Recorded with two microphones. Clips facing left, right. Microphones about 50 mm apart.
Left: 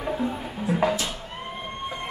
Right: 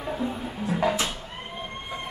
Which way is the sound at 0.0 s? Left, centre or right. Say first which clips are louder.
Left 2 dB; centre.